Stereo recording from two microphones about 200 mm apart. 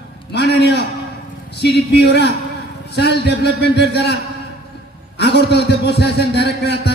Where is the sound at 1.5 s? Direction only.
55° left (ahead or behind).